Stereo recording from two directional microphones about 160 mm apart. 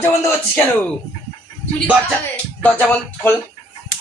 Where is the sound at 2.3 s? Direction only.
10° left (ahead or behind).